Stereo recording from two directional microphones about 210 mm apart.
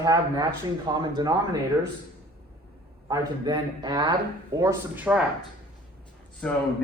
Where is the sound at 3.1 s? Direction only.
20° right (ahead or behind).